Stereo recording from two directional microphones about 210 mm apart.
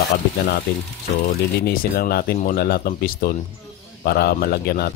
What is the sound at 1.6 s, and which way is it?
Speech, 45° left (ahead or behind).